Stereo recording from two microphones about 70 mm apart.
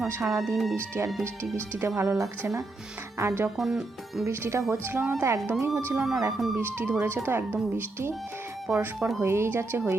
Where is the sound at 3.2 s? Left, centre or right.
Right.